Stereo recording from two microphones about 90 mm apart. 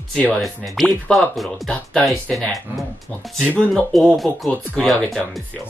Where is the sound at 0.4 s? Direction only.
Centre (ahead or behind).